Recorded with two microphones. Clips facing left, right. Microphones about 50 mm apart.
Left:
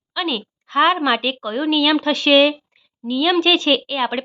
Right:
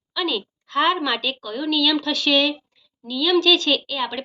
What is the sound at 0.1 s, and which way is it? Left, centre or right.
A woman's voice, centre.